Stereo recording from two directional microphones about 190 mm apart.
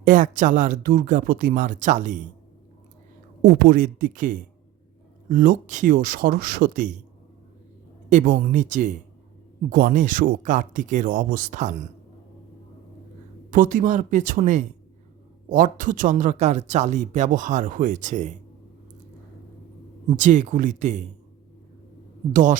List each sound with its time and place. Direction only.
0.0 s speech: 45° right (ahead or behind)
3.4 s speech: 50° right (ahead or behind)
8.1 s speech: 45° right (ahead or behind)
13.5 s a man's voice: 45° right (ahead or behind)
20.1 s a man's voice: 40° right (ahead or behind)
22.3 s speech: 45° right (ahead or behind)